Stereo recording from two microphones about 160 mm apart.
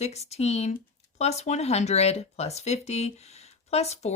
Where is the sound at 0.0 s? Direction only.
40° left (ahead or behind).